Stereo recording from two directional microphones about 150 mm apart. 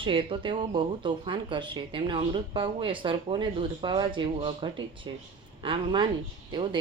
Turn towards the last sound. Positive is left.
turn(degrees=-35)  # may be behind; listen again after turning